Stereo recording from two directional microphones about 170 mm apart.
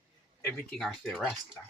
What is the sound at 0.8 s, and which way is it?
Speech, centre (ahead or behind).